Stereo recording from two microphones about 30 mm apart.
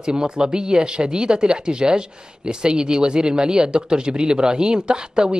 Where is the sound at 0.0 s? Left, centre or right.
Right.